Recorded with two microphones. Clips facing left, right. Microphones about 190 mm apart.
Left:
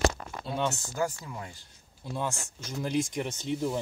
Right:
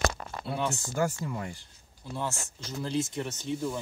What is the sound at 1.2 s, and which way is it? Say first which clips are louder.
Speech: right 6 dB; 55° right (ahead or behind).